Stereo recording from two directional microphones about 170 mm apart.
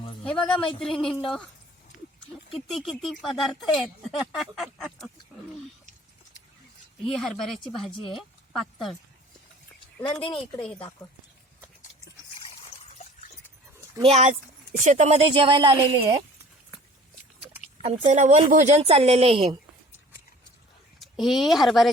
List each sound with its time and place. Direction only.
0.3 s speech: 5° left (ahead or behind)
2.6 s speech: centre (ahead or behind)
7.0 s speech: centre (ahead or behind)
10.0 s speech: 30° left (ahead or behind)
12.8 s a sound: 45° left (ahead or behind)
14.0 s a woman's voice: 35° right (ahead or behind)
17.8 s a woman's voice: 35° right (ahead or behind)
18.2 s a woman's voice: 45° right (ahead or behind)
21.0 s speech: centre (ahead or behind)